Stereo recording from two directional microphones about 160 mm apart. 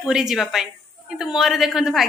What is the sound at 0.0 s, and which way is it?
A woman's voice, 5° right (ahead or behind).